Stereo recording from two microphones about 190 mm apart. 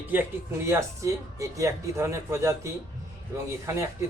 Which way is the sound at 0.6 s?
15° right (ahead or behind).